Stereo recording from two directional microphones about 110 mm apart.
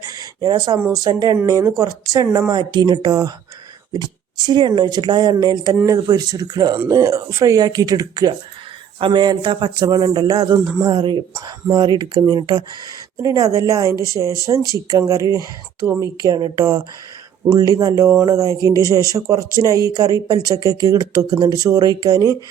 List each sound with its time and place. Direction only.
0.0 s a sound: 30° right (ahead or behind)
1.0 s speech: 35° right (ahead or behind)
10.9 s speech: 45° right (ahead or behind)
13.2 s a woman's voice: 30° right (ahead or behind)
16.1 s speech: 40° right (ahead or behind)